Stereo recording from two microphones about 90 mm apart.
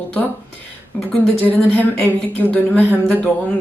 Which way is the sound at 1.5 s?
20° left (ahead or behind).